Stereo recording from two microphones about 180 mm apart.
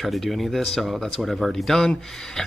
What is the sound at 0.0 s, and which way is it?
Speech, centre (ahead or behind).